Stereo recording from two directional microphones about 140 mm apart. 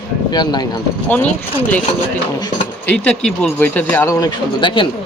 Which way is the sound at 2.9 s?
5° left (ahead or behind).